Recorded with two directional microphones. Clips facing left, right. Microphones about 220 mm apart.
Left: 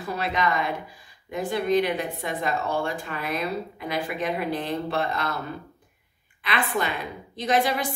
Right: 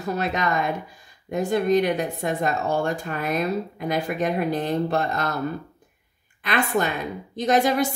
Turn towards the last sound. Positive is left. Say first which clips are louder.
# right 4 dB
turn(degrees=-45)  # may be behind; listen again after turning